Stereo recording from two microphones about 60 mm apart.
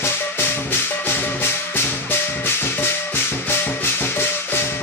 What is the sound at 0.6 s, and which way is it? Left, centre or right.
Music, left.